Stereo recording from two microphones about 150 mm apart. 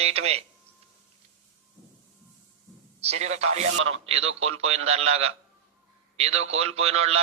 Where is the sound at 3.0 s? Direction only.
45° right (ahead or behind).